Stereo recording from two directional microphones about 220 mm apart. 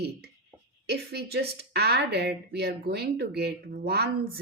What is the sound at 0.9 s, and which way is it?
Speech, 45° right (ahead or behind).